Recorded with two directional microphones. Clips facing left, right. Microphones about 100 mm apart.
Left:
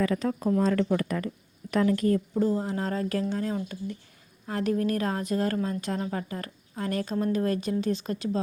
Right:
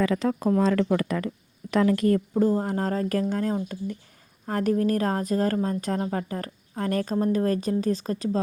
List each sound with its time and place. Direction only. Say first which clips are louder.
0.0 s speech: right 3 dB; 90° right
2.3 s a woman's voice: right 3 dB; 45° right (ahead or behind)